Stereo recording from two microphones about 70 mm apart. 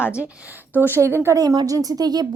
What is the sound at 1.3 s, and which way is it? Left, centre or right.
Speech, right.